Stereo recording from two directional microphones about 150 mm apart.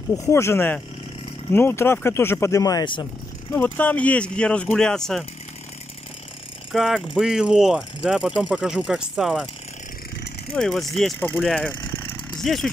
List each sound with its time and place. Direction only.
0.1 s speech: 20° left (ahead or behind)
3.5 s speech: 15° left (ahead or behind)
6.7 s speech: centre (ahead or behind)
10.5 s speech: centre (ahead or behind)